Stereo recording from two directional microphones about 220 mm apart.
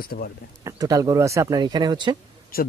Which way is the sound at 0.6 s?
15° right (ahead or behind).